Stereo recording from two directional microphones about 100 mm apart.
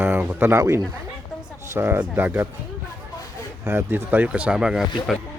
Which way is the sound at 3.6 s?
25° right (ahead or behind).